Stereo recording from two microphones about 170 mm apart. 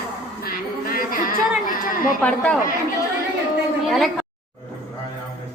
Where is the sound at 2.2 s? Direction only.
5° left (ahead or behind).